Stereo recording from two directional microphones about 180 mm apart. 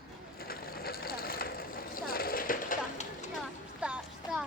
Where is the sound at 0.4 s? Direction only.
55° left (ahead or behind).